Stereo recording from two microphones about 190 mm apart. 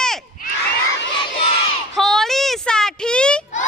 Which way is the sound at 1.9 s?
Centre (ahead or behind).